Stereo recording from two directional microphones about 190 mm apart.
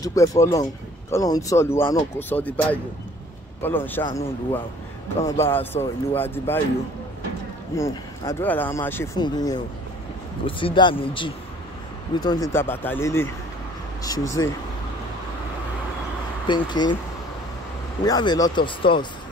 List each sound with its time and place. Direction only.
0.0 s speech: 15° left (ahead or behind)
7.7 s speech: 15° left (ahead or behind)
16.4 s speech: 25° left (ahead or behind)
18.0 s speech: 20° left (ahead or behind)